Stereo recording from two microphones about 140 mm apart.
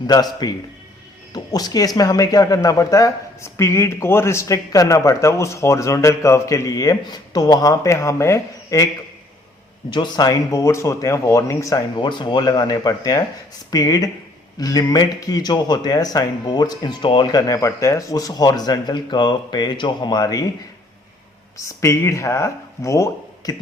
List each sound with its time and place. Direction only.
0.1 s speech: 30° left (ahead or behind)
9.9 s speech: 30° left (ahead or behind)
11.9 s speech: 35° left (ahead or behind)
21.6 s speech: 20° left (ahead or behind)